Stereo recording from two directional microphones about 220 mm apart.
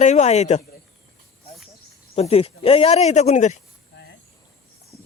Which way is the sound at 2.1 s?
25° left (ahead or behind).